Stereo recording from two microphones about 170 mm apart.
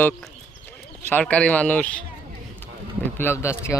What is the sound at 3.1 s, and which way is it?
Speech, 15° left (ahead or behind).